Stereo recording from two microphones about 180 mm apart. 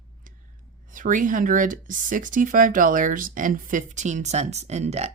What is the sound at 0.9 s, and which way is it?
Speech, 45° right (ahead or behind).